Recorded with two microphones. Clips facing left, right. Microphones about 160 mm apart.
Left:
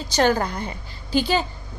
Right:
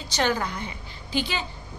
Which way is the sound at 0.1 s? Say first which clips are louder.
Left 5 dB; 40° left (ahead or behind).